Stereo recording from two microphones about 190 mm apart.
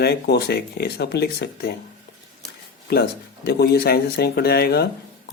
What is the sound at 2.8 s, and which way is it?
Speech, 55° left (ahead or behind).